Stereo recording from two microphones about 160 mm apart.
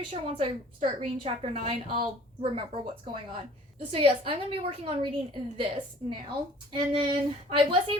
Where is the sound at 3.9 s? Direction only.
35° right (ahead or behind).